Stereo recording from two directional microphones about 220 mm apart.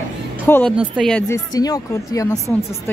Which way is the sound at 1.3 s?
15° left (ahead or behind).